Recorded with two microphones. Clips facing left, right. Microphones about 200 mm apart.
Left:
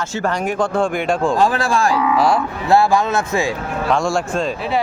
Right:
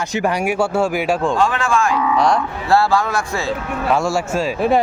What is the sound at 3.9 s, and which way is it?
Speech, 5° right (ahead or behind).